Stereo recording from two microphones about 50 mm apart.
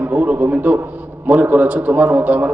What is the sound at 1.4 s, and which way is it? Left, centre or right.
A man's voice, right.